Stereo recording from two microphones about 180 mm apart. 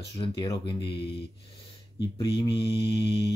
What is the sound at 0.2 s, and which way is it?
Speech, 25° left (ahead or behind).